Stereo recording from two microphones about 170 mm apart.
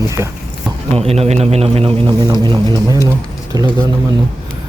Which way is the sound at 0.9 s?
35° right (ahead or behind).